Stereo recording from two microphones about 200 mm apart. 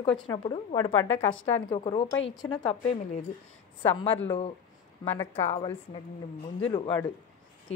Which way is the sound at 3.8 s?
25° left (ahead or behind).